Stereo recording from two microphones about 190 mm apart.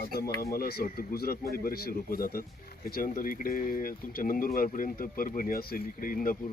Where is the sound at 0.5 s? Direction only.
55° left (ahead or behind).